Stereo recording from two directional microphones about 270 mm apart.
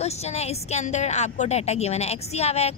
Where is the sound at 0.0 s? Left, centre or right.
Left.